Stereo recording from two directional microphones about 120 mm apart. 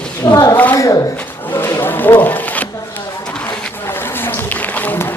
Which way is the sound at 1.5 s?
20° left (ahead or behind).